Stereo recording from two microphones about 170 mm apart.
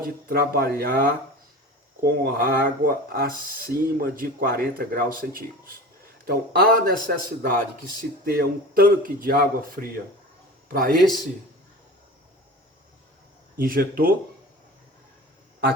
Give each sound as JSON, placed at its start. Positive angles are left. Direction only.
{"t": 0.0, "sound": "speech", "side_deg": -60}
{"t": 6.2, "sound": "a man's voice", "side_deg": -65}
{"t": 13.6, "sound": "speech", "side_deg": -60}